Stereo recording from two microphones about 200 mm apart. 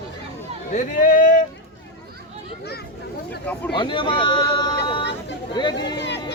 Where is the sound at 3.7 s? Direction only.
25° left (ahead or behind).